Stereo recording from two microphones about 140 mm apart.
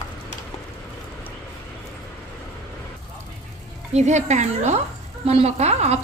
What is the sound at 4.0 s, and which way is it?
A woman's voice, 55° right (ahead or behind).